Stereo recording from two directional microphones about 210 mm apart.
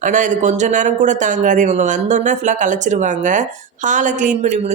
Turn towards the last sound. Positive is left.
turn(degrees=-30)  # may be behind; listen again after turning